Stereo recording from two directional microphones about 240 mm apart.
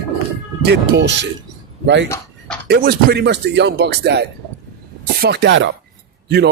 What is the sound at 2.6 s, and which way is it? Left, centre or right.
Speech, right.